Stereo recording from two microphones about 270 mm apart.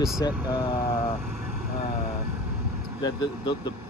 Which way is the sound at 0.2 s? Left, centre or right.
Centre.